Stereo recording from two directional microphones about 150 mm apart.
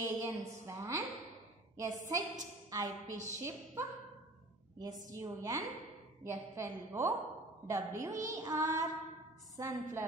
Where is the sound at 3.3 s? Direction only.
20° right (ahead or behind).